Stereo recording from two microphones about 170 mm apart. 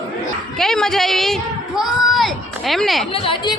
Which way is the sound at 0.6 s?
5° left (ahead or behind).